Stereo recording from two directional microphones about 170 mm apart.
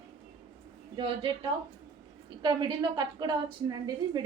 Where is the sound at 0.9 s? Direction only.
30° right (ahead or behind).